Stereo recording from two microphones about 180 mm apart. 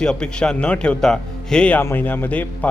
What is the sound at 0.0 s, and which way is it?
Speech, 5° left (ahead or behind).